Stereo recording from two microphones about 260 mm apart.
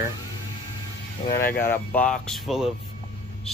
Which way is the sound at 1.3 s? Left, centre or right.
Left.